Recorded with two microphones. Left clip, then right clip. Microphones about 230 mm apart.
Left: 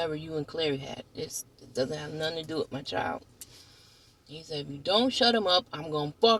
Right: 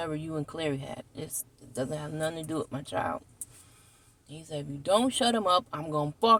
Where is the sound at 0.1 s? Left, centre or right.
Centre.